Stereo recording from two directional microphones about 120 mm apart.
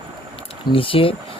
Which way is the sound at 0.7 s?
50° left (ahead or behind).